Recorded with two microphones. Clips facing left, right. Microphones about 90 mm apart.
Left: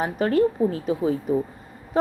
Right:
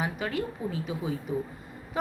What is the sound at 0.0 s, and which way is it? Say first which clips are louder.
A woman's voice: left 10 dB; 40° left (ahead or behind).